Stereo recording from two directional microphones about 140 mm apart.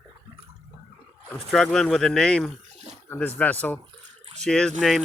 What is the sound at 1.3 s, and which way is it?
Speech, 5° left (ahead or behind).